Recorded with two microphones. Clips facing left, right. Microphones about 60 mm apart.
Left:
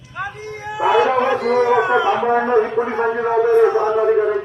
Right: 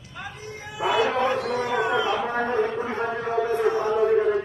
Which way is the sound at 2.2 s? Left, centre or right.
Left.